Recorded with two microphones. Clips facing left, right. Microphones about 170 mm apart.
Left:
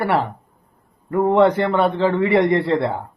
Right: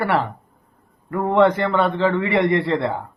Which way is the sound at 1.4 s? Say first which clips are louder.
Right 1 dB; 10° left (ahead or behind).